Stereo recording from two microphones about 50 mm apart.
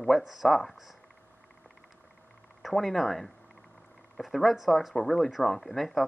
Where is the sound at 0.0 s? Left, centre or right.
Centre.